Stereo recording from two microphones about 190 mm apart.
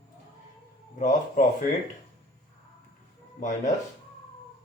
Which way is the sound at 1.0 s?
45° left (ahead or behind).